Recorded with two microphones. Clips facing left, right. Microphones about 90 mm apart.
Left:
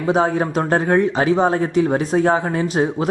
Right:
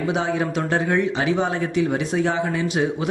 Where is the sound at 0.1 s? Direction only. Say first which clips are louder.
Left 8 dB; 40° left (ahead or behind).